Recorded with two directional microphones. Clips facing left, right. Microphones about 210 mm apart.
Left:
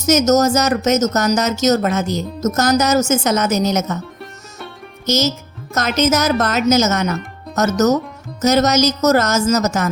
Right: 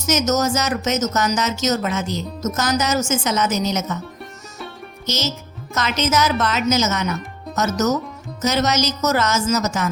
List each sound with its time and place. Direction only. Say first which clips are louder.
0.0 s speech: left 6 dB; 40° left (ahead or behind)
5.0 s a woman's voice: left 7 dB; 45° left (ahead or behind)
8.4 s speech: left 6 dB; 40° left (ahead or behind)